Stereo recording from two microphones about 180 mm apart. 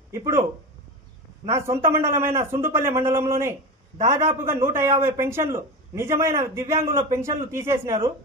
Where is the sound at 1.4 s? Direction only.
15° right (ahead or behind).